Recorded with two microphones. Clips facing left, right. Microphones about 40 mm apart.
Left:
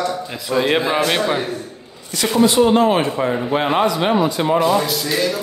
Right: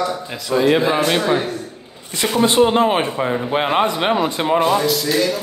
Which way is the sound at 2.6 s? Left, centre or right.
Centre.